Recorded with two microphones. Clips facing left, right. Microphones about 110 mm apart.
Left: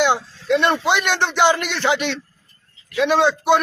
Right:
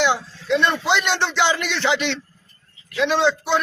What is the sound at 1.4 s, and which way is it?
A man's voice, 50° left (ahead or behind).